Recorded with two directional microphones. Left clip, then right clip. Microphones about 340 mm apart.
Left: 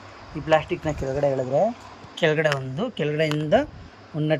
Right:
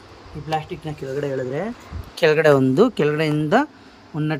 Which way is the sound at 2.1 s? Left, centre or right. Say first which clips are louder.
Right 6 dB; centre.